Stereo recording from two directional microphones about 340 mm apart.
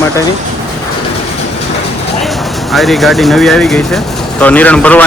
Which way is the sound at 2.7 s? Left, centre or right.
Centre.